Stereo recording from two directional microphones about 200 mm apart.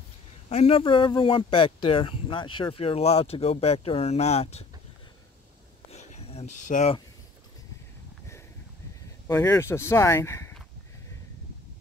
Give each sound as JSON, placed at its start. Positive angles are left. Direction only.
{"t": 0.5, "sound": "speech", "side_deg": 30}
{"t": 5.9, "sound": "a sound", "side_deg": 30}
{"t": 9.3, "sound": "speech", "side_deg": 15}